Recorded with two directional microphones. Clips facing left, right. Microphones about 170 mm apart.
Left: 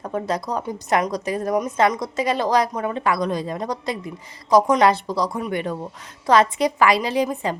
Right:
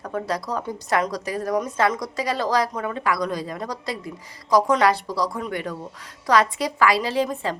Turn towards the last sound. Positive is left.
turn(degrees=15)  # may be behind; listen again after turning